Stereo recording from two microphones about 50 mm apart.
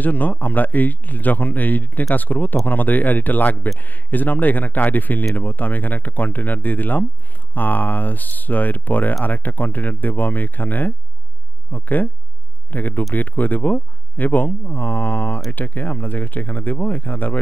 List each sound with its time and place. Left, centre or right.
0.0 s speech: left